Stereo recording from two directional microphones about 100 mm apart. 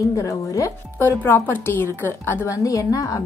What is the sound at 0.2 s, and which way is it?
Speech, 35° left (ahead or behind).